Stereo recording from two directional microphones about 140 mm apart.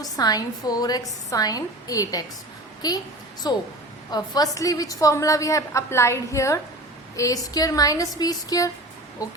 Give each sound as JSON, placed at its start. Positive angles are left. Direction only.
{"t": 0.0, "sound": "a woman's voice", "side_deg": 25}